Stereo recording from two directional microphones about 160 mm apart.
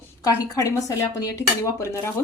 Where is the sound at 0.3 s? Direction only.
20° left (ahead or behind).